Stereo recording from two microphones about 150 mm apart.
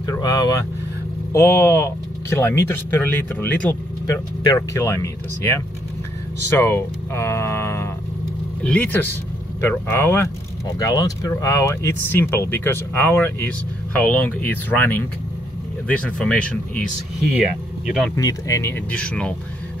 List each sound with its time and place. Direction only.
0.0 s speech: 25° left (ahead or behind); by 16.8 s 5° left (ahead or behind)
17.8 s speech: 5° right (ahead or behind)
18.1 s speech: 20° left (ahead or behind)